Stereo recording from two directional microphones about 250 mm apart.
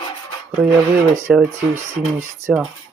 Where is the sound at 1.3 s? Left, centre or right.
Centre.